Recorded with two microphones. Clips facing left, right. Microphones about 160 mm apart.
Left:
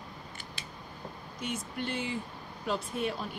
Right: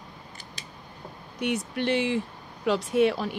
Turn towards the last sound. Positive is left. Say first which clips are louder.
# right 11 dB
turn(degrees=-85)